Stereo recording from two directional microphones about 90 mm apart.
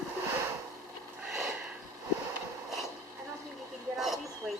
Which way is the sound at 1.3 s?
5° right (ahead or behind).